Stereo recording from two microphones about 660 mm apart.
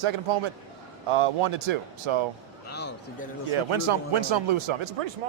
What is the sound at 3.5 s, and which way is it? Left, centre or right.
Speech, right.